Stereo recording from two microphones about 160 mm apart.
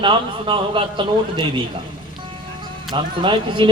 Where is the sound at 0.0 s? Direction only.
30° right (ahead or behind).